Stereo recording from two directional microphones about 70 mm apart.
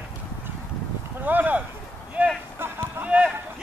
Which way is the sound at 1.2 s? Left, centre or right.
Right.